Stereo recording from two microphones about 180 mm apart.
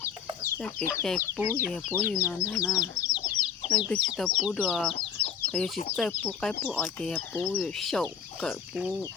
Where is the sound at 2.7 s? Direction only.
20° left (ahead or behind).